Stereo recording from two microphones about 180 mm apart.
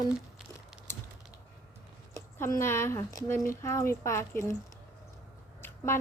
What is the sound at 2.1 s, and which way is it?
A woman's voice, 10° left (ahead or behind).